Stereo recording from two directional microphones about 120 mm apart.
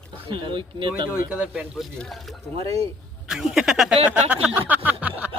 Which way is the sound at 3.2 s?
5° right (ahead or behind).